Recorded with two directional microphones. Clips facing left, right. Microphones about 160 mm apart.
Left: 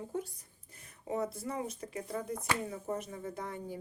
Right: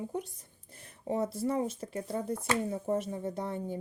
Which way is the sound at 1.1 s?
25° right (ahead or behind).